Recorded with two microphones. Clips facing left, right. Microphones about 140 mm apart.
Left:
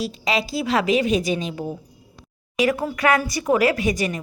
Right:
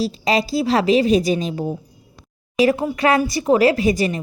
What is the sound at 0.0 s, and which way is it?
A woman's voice, 35° right (ahead or behind).